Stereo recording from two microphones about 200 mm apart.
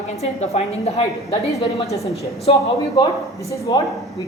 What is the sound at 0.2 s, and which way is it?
A woman's voice, 35° left (ahead or behind).